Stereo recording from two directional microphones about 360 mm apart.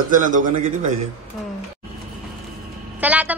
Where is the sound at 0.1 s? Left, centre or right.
Right.